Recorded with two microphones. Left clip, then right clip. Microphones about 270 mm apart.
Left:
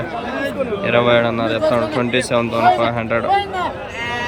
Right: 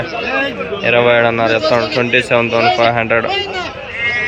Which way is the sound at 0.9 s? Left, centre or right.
Centre.